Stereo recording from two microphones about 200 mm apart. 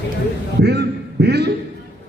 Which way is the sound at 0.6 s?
55° right (ahead or behind).